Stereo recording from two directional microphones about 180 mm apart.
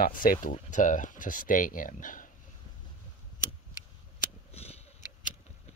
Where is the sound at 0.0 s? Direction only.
50° left (ahead or behind).